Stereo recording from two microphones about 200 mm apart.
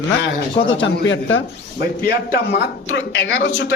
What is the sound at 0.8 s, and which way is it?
Speech, 70° left (ahead or behind).